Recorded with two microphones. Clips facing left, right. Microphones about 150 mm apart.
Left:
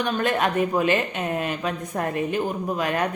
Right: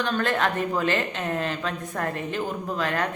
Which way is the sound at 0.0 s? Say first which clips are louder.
Left 2 dB; 15° left (ahead or behind).